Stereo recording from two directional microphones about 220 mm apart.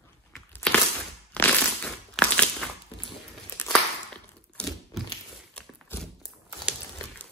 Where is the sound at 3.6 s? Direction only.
5° left (ahead or behind).